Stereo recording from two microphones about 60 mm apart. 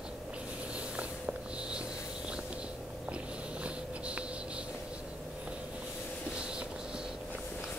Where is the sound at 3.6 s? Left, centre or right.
Centre.